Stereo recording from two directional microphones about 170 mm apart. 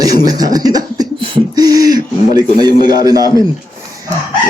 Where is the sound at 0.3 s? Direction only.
20° right (ahead or behind).